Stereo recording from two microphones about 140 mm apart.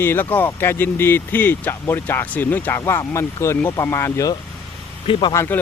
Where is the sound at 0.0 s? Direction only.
15° left (ahead or behind).